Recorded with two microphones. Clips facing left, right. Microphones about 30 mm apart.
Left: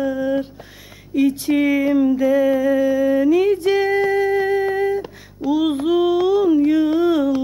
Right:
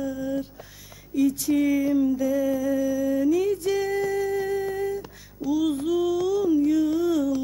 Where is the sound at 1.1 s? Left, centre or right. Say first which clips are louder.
Left 5 dB; left.